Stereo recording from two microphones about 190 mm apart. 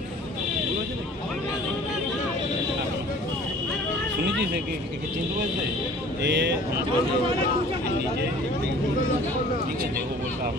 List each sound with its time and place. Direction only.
6.2 s speech: 65° right (ahead or behind)